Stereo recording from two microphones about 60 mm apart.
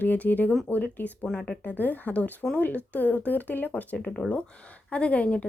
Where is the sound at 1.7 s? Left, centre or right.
Left.